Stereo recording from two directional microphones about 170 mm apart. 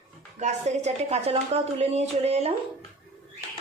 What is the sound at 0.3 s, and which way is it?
Speech, 45° right (ahead or behind).